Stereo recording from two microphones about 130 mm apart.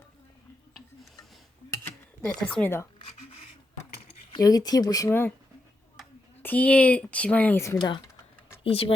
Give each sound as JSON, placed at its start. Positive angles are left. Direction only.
{"t": 2.2, "sound": "speech", "side_deg": 15}
{"t": 4.4, "sound": "speech", "side_deg": 30}
{"t": 5.0, "sound": "speech", "side_deg": 15}
{"t": 6.4, "sound": "speech", "side_deg": 10}
{"t": 7.8, "sound": "speech", "side_deg": 35}
{"t": 8.6, "sound": "speech", "side_deg": 45}